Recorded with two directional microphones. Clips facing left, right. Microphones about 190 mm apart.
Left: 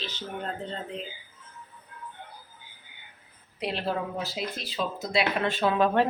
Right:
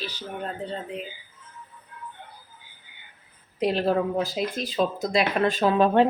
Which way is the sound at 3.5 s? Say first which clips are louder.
Right 7 dB; 45° right (ahead or behind).